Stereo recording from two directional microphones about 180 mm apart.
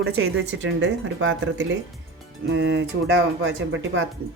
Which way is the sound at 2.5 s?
80° right.